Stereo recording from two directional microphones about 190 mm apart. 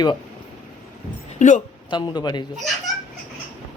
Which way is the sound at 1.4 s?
40° left (ahead or behind).